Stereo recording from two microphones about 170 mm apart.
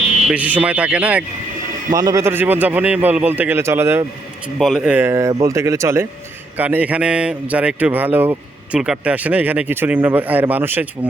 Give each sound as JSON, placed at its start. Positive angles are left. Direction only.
{"t": 0.3, "sound": "speech", "side_deg": -10}
{"t": 2.0, "sound": "speech", "side_deg": -20}
{"t": 4.4, "sound": "speech", "side_deg": -5}